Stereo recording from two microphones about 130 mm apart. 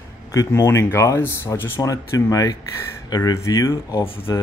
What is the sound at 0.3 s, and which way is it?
Speech, 25° left (ahead or behind).